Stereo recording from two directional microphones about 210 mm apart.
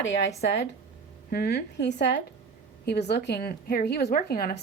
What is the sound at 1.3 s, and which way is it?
Speech, 50° left (ahead or behind).